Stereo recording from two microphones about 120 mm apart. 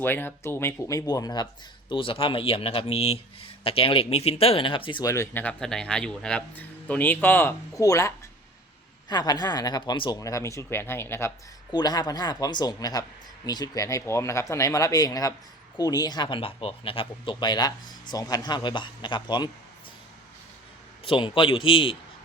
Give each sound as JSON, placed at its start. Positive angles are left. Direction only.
{"t": 0.0, "sound": "speech", "side_deg": 15}
{"t": 1.9, "sound": "speech", "side_deg": 45}
{"t": 5.0, "sound": "speech", "side_deg": 25}
{"t": 11.7, "sound": "speech", "side_deg": 35}
{"t": 21.0, "sound": "speech", "side_deg": 45}